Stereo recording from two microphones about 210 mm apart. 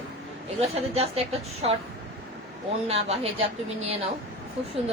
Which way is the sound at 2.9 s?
30° right (ahead or behind).